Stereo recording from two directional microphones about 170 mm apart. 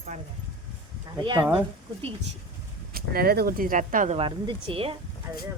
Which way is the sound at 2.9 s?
60° right (ahead or behind).